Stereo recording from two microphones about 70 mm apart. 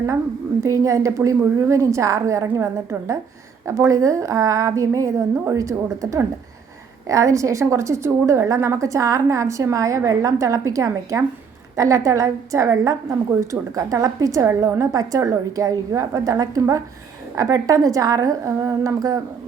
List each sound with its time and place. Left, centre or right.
0.6 s a woman's voice: right
3.7 s a woman's voice: right
18.9 s a woman's voice: right